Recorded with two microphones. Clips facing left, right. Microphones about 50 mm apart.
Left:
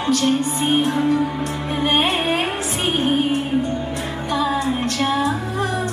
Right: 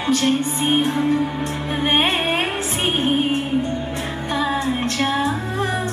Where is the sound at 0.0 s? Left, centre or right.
Right.